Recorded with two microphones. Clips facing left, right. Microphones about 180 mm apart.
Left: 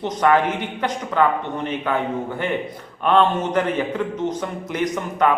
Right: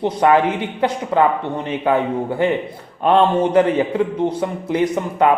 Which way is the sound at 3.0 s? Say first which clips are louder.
Right 3 dB; 30° right (ahead or behind).